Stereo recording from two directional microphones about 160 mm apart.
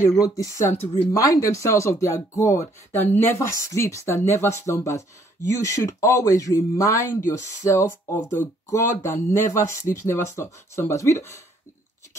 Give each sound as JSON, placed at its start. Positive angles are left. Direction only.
{"t": 0.2, "sound": "speech", "side_deg": 20}